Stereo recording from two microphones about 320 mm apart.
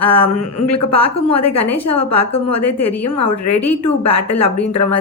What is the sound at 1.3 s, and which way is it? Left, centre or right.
Speech, left.